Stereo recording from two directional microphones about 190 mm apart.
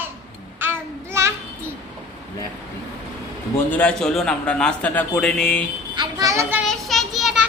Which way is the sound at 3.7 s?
5° left (ahead or behind).